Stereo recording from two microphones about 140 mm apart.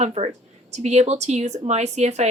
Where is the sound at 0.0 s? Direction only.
45° right (ahead or behind).